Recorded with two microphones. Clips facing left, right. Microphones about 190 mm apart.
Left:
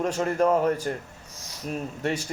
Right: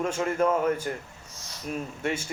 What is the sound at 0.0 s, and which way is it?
Speech, 40° left (ahead or behind).